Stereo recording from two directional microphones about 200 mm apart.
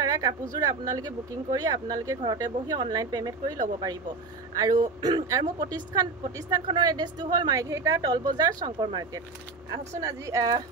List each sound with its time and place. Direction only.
0.0 s a woman's voice: 20° right (ahead or behind)